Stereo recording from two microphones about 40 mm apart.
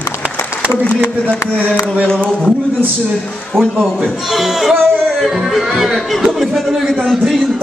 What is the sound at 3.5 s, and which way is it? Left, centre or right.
Speech, centre.